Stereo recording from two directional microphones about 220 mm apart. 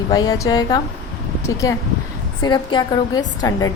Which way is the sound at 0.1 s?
15° left (ahead or behind).